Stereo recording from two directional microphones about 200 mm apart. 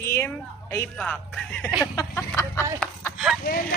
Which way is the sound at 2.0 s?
15° left (ahead or behind).